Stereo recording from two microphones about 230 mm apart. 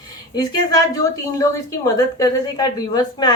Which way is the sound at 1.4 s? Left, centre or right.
Centre.